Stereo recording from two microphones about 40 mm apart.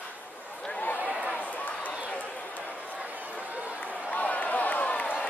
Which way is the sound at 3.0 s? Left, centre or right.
Right.